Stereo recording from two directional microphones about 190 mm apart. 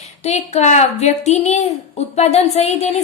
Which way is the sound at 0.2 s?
35° left (ahead or behind).